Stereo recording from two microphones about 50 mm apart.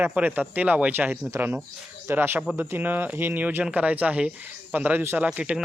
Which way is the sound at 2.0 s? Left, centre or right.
Right.